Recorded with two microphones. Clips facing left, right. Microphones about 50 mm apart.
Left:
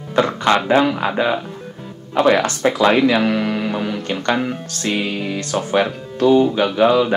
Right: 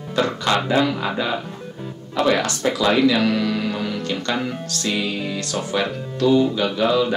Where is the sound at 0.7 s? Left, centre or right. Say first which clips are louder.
Left 4 dB; left.